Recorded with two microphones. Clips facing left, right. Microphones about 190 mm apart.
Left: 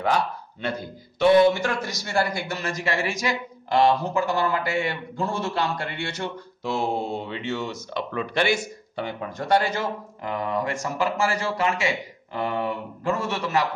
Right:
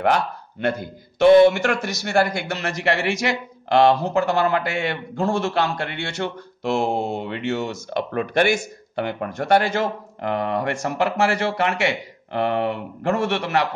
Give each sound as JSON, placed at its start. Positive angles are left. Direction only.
{"t": 0.0, "sound": "speech", "side_deg": -60}
{"t": 1.5, "sound": "a man's voice", "side_deg": -75}